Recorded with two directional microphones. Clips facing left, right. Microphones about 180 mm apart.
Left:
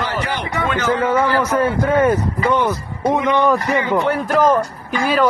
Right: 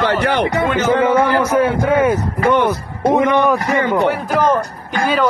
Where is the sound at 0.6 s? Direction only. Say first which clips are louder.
Right 1 dB; 20° right (ahead or behind).